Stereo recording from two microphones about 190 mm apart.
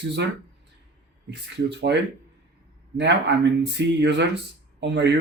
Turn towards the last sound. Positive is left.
turn(degrees=-65)  # may be behind; listen again after turning